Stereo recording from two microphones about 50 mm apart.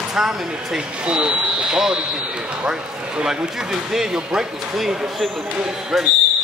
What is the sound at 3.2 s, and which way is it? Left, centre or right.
Speech, centre.